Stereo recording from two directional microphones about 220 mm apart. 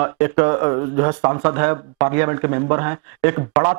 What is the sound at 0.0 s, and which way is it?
Speech, 25° right (ahead or behind).